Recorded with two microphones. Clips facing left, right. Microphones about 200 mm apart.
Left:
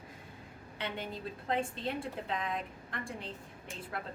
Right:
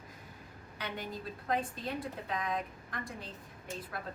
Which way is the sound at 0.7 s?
25° left (ahead or behind).